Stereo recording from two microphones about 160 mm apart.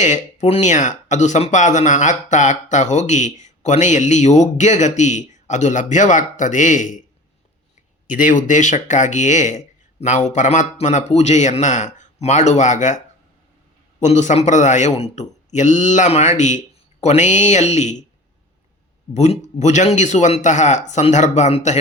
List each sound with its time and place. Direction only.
0.0 s speech: 50° left (ahead or behind)
8.0 s speech: 55° left (ahead or behind)
14.0 s speech: 50° left (ahead or behind)
19.1 s speech: 45° left (ahead or behind)